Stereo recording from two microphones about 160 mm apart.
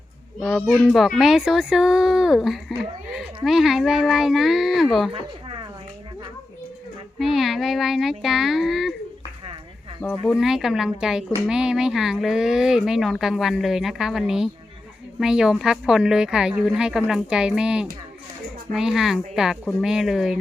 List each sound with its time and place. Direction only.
0.4 s a child's voice: centre (ahead or behind)
5.1 s a sound: 35° right (ahead or behind)
7.2 s a child's voice: centre (ahead or behind)
10.2 s a child's voice: centre (ahead or behind)